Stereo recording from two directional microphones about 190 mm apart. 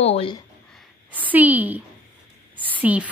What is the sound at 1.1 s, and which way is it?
A woman's voice, 10° right (ahead or behind).